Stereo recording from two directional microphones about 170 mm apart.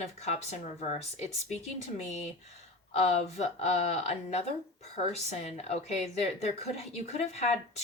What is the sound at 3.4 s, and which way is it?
Speech, 40° left (ahead or behind).